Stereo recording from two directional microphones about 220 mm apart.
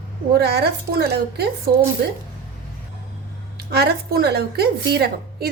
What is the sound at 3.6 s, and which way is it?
A woman's voice, 45° right (ahead or behind).